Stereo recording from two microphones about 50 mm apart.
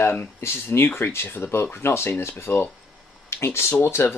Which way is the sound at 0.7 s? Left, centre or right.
Left.